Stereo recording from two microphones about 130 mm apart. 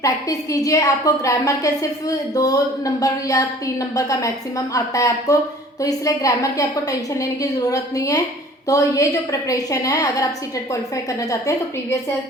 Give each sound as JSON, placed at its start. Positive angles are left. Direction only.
{"t": 0.0, "sound": "a woman's voice", "side_deg": 25}